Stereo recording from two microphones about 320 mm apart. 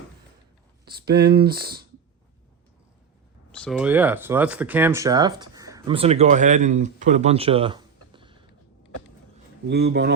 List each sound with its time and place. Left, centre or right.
0.9 s speech: right
3.5 s speech: centre
9.6 s speech: right